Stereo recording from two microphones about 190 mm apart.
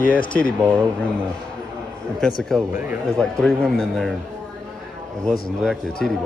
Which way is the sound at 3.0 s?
5° left (ahead or behind).